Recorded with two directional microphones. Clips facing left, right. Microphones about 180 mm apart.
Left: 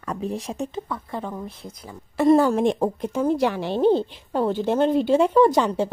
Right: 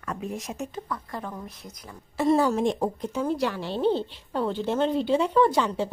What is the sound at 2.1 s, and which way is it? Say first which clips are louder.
A woman's voice: left 5 dB; 55° left (ahead or behind).